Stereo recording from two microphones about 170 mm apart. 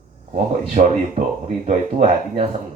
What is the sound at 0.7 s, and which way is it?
Speech, 45° right (ahead or behind).